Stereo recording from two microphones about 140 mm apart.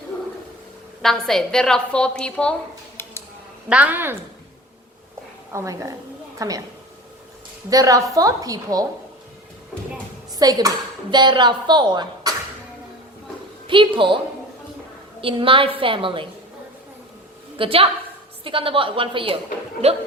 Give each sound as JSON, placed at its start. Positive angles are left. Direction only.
{"t": 1.0, "sound": "a woman's voice", "side_deg": 5}
{"t": 3.0, "sound": "a sound", "side_deg": 15}
{"t": 3.7, "sound": "a woman's voice", "side_deg": -10}
{"t": 5.5, "sound": "a woman's voice", "side_deg": -20}
{"t": 7.7, "sound": "a woman's voice", "side_deg": -25}
{"t": 10.3, "sound": "a woman's voice", "side_deg": -25}
{"t": 13.7, "sound": "a woman's voice", "side_deg": -35}
{"t": 15.2, "sound": "a woman's voice", "side_deg": -40}
{"t": 17.6, "sound": "a woman's voice", "side_deg": -40}
{"t": 19.8, "sound": "a woman's voice", "side_deg": -50}